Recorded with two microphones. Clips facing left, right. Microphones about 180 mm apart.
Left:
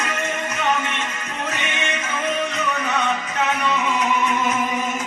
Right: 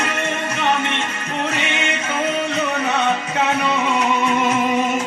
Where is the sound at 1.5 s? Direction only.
30° right (ahead or behind).